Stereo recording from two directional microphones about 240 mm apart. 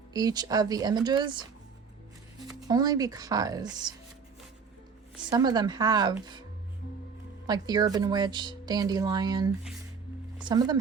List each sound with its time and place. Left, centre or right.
0.1 s speech: centre
2.6 s speech: centre
5.3 s speech: centre
7.4 s speech: centre